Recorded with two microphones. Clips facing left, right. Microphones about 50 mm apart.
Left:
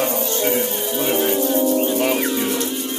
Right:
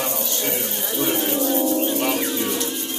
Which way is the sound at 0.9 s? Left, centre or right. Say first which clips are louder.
Left 3 dB; centre.